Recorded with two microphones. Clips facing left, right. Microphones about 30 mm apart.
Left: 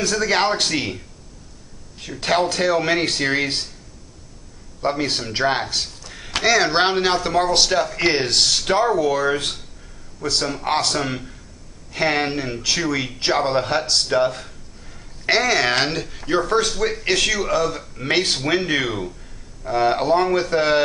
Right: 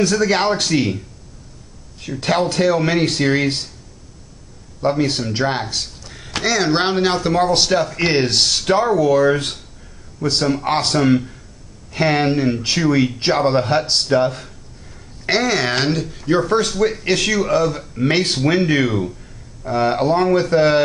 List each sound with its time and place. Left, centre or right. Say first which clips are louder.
0.0 s speech: right 3 dB; centre
4.8 s speech: right 4 dB; centre
8.5 s speech: right 2 dB; centre
11.9 s speech: right 4 dB; centre